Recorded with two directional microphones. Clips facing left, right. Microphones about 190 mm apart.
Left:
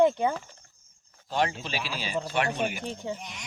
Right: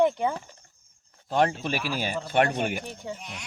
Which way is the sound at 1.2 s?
50° right (ahead or behind).